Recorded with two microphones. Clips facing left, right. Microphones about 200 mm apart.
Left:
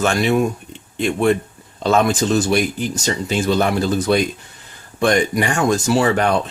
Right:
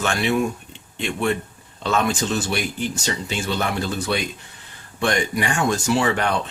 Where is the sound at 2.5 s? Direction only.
40° left (ahead or behind).